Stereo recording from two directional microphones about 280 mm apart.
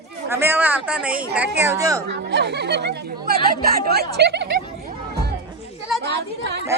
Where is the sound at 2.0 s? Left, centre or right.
Right.